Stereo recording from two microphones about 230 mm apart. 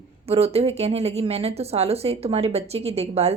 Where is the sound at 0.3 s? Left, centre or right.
Right.